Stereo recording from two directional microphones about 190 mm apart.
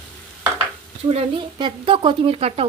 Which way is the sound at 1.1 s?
30° right (ahead or behind).